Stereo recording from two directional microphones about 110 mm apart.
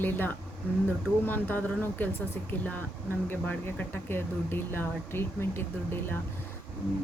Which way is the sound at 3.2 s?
15° left (ahead or behind).